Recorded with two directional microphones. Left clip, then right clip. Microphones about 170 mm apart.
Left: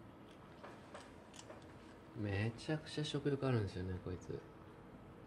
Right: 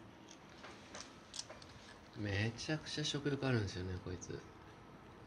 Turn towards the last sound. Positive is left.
turn(degrees=10)  # may be behind; listen again after turning